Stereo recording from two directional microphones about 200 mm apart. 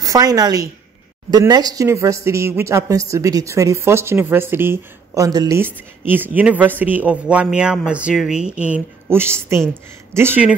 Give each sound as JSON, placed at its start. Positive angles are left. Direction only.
{"t": 0.0, "sound": "speech", "side_deg": -20}